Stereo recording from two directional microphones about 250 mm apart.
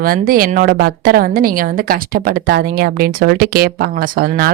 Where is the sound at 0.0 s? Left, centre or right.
Right.